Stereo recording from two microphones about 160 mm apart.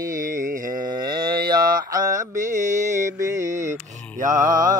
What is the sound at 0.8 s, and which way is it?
Mantra, 25° right (ahead or behind).